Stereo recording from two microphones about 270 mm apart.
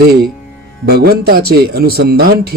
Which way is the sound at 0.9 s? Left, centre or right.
Right.